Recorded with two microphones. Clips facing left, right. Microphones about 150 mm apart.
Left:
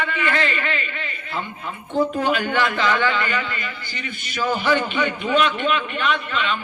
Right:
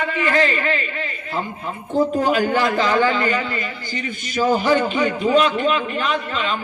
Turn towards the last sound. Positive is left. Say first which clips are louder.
# right 1 dB
turn(degrees=-35)  # may be behind; listen again after turning